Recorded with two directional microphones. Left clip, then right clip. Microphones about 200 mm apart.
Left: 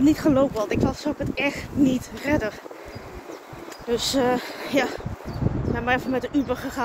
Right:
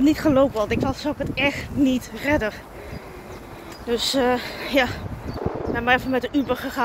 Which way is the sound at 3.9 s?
15° left (ahead or behind).